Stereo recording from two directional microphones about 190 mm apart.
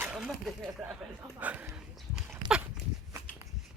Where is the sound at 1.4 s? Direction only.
10° right (ahead or behind).